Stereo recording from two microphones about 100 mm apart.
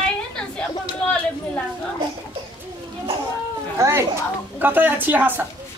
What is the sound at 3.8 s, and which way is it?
A woman's voice, 25° right (ahead or behind).